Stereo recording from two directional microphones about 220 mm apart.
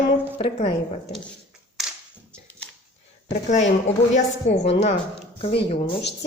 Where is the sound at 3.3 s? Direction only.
35° left (ahead or behind).